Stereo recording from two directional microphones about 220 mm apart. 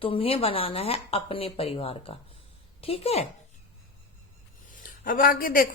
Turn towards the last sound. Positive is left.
turn(degrees=40)  # may be behind; listen again after turning